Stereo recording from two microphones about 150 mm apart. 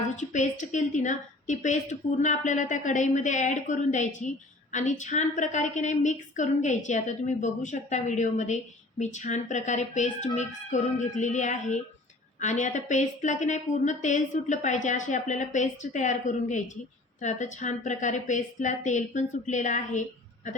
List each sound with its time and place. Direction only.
0.2 s a woman's voice: 55° left (ahead or behind)